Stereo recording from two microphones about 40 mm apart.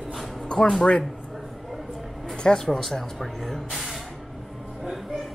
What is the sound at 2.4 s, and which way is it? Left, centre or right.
Speech, centre.